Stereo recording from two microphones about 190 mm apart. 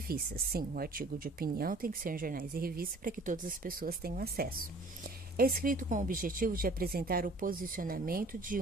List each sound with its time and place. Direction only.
0.1 s speech: 50° right (ahead or behind)